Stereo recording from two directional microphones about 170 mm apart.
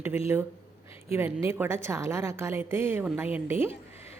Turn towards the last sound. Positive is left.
turn(degrees=-15)  # may be behind; listen again after turning